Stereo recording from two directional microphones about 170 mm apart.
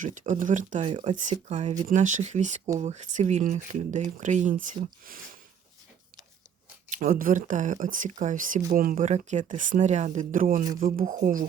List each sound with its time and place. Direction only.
0.0 s speech: 50° right (ahead or behind)
6.9 s speech: 55° right (ahead or behind)